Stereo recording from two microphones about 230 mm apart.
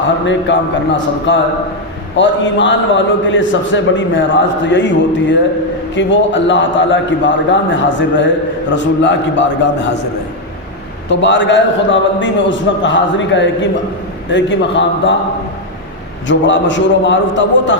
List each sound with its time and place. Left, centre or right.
0.3 s a man's voice: left
11.1 s a man's voice: left
16.2 s a man's voice: left